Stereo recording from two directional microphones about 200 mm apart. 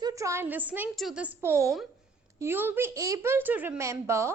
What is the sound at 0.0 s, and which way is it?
A woman's voice, 15° right (ahead or behind).